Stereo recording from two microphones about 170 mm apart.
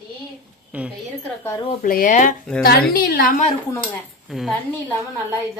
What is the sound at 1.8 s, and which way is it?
A woman's voice, 55° left (ahead or behind).